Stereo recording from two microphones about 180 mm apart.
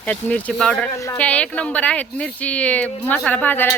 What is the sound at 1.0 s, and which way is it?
Speech, 15° left (ahead or behind).